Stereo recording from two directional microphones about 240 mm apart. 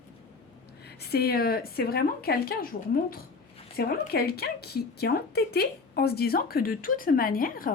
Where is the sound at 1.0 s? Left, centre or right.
Left.